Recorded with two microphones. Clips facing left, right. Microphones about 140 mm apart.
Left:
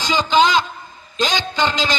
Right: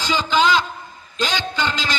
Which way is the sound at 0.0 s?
15° left (ahead or behind).